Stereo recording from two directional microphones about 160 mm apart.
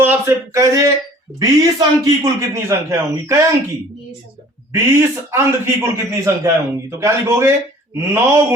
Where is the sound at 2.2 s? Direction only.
20° right (ahead or behind).